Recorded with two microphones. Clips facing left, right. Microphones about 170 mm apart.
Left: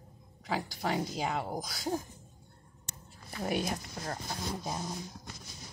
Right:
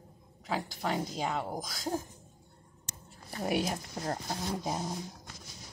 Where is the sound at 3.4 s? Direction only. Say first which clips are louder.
Right 2 dB; 10° right (ahead or behind).